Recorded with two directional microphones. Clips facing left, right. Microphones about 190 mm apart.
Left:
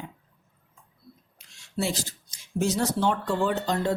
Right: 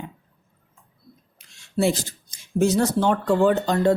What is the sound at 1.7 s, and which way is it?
Speech, 55° right (ahead or behind).